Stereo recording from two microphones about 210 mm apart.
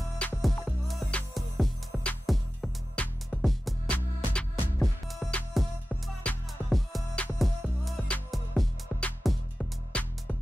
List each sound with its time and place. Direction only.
0.3 s music: centre (ahead or behind)